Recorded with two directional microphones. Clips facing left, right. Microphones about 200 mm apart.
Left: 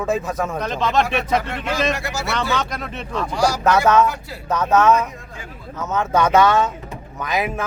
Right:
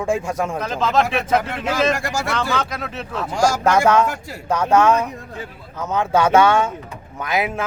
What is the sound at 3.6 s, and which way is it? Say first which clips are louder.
Speech: left 1 dB; 10° right (ahead or behind).